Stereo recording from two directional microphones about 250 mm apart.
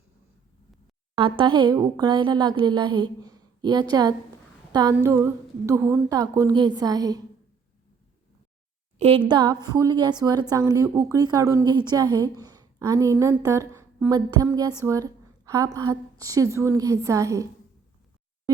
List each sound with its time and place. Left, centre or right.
1.1 s a woman's voice: centre
4.7 s a sound: centre
5.0 s a woman's voice: centre
9.0 s a woman's voice: right